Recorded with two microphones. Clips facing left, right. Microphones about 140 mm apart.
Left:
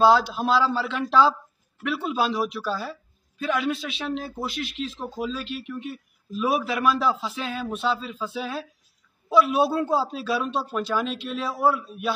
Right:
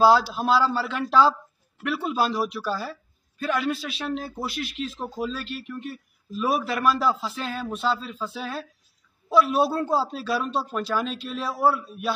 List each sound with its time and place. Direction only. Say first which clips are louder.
0.0 s speech: even; 5° right (ahead or behind)